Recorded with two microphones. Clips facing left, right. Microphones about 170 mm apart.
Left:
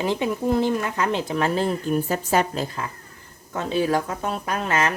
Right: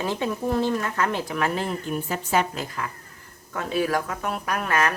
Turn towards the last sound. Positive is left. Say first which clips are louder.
# left 1 dB
turn(degrees=25)  # may be behind; listen again after turning